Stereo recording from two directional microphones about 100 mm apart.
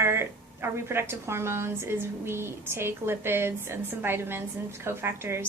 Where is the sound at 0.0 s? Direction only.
25° right (ahead or behind).